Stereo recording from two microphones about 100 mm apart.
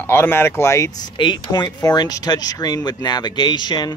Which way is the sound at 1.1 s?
55° left (ahead or behind).